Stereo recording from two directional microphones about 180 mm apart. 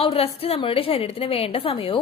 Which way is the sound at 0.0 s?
30° left (ahead or behind).